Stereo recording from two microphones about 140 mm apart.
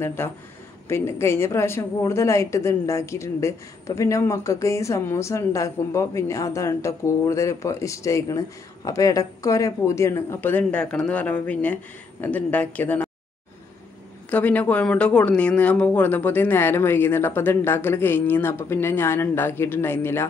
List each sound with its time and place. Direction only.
0.0 s speech: 15° left (ahead or behind)
14.3 s speech: 10° left (ahead or behind)